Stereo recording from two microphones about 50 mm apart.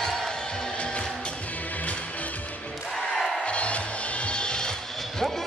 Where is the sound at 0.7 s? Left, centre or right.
Left.